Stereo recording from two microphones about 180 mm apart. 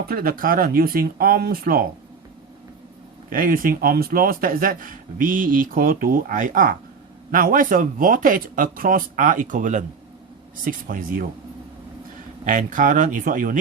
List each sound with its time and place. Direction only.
0.1 s speech: 55° right (ahead or behind)
3.3 s speech: 50° right (ahead or behind)
12.5 s speech: 45° right (ahead or behind)